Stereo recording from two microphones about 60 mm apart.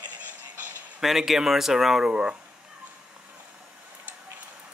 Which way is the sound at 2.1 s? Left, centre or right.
Centre.